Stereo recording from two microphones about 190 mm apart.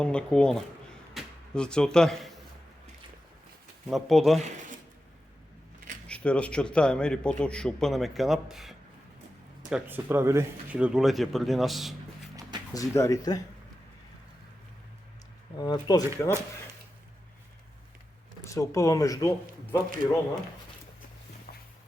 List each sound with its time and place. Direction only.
0.0 s a man's voice: 5° left (ahead or behind)
3.8 s a man's voice: centre (ahead or behind)
6.1 s a man's voice: 5° left (ahead or behind)
12.7 s speech: 15° left (ahead or behind)
15.5 s speech: 20° left (ahead or behind)
18.4 s speech: 15° left (ahead or behind)